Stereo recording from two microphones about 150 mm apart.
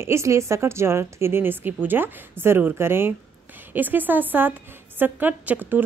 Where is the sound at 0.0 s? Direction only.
20° right (ahead or behind).